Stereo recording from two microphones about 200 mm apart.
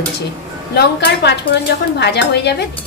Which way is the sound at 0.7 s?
55° left (ahead or behind).